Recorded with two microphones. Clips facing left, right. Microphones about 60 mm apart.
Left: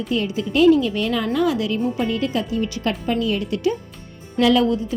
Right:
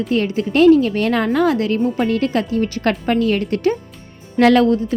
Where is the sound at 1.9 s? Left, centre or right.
Right.